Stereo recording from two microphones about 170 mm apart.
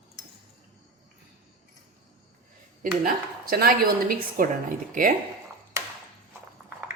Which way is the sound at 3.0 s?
60° right (ahead or behind).